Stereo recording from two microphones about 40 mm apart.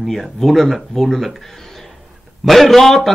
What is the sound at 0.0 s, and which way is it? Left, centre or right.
A man's voice, centre.